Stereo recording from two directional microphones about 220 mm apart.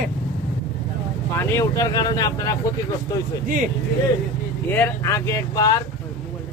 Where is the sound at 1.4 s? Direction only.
10° left (ahead or behind).